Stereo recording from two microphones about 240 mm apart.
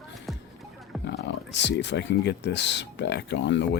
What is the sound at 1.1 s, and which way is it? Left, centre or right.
Speech, left.